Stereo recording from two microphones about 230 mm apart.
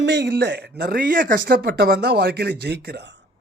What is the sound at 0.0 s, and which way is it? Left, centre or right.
A man's voice, right.